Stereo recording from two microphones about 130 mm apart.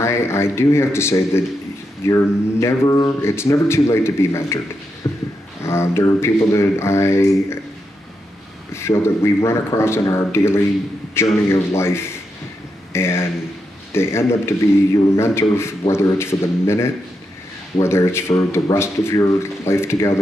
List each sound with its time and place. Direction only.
0.0 s speech: 20° left (ahead or behind)
8.7 s speech: 20° left (ahead or behind)